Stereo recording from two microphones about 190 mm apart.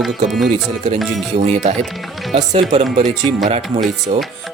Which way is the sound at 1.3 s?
35° right (ahead or behind).